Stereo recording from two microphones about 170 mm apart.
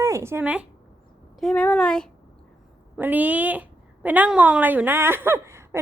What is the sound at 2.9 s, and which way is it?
A woman's voice, 10° right (ahead or behind).